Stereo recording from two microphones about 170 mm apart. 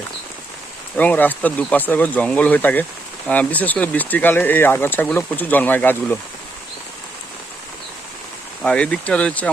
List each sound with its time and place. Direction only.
0.9 s speech: 10° left (ahead or behind)
8.6 s speech: 5° left (ahead or behind)